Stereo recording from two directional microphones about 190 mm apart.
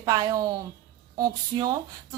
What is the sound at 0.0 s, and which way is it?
Speech, 20° right (ahead or behind).